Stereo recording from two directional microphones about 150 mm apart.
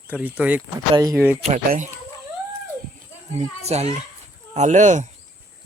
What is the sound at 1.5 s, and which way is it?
Speech, 55° right (ahead or behind).